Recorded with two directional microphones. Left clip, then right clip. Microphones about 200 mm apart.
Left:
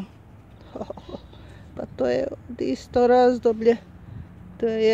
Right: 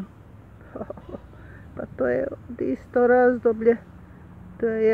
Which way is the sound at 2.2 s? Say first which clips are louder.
Even; 25° left (ahead or behind).